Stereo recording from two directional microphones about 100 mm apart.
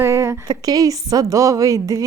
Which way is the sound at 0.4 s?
40° right (ahead or behind).